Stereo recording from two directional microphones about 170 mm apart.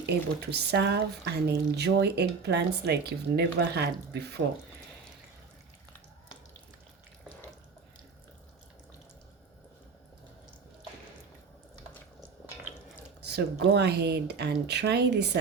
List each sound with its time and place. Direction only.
0.0 s speech: 75° right (ahead or behind)
13.2 s speech: 75° right (ahead or behind)